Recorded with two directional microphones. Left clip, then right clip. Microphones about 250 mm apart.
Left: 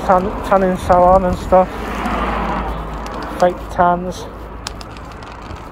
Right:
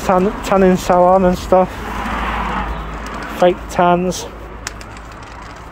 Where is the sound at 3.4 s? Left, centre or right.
Right.